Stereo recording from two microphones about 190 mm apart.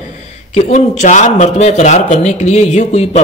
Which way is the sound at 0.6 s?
35° left (ahead or behind).